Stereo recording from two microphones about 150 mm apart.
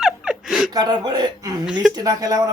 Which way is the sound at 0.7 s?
25° right (ahead or behind).